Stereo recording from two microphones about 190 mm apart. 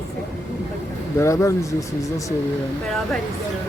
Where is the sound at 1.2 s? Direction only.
15° left (ahead or behind).